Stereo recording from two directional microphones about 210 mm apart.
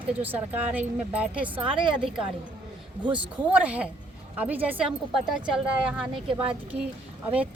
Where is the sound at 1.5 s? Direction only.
25° right (ahead or behind).